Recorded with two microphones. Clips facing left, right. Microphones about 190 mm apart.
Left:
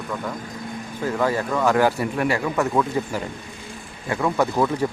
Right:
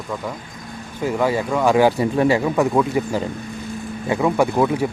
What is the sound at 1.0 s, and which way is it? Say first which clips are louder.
Speech: right 3 dB; 10° right (ahead or behind).